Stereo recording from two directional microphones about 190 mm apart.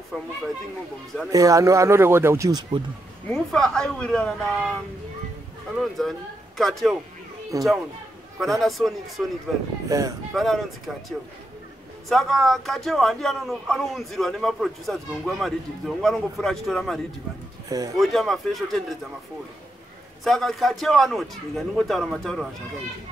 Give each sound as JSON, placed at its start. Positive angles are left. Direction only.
{"t": 0.1, "sound": "speech", "side_deg": 5}
{"t": 1.3, "sound": "a man's voice", "side_deg": -20}
{"t": 3.3, "sound": "speech", "side_deg": 5}
{"t": 5.8, "sound": "speech", "side_deg": 0}
{"t": 7.5, "sound": "a man's voice", "side_deg": -15}
{"t": 8.4, "sound": "speech", "side_deg": 0}
{"t": 9.8, "sound": "speech", "side_deg": -20}
{"t": 10.3, "sound": "speech", "side_deg": 0}
{"t": 17.6, "sound": "speech", "side_deg": -20}
{"t": 18.0, "sound": "speech", "side_deg": 0}
{"t": 20.2, "sound": "speech", "side_deg": 0}